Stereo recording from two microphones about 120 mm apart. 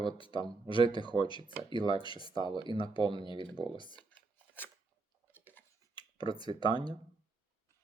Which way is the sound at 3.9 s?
15° left (ahead or behind).